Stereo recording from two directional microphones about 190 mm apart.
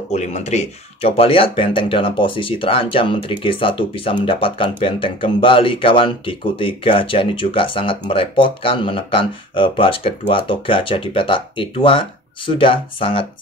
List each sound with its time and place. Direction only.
0.1 s speech: 35° left (ahead or behind)